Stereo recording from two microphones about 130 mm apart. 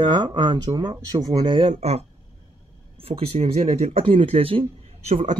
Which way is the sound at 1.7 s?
55° right (ahead or behind).